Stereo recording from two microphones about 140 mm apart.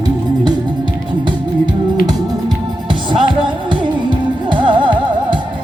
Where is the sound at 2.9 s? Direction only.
35° right (ahead or behind).